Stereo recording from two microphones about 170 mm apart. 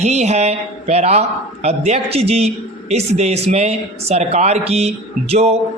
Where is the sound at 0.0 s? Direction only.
40° right (ahead or behind).